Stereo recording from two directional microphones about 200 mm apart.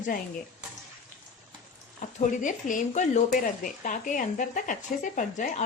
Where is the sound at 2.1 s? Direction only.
40° left (ahead or behind).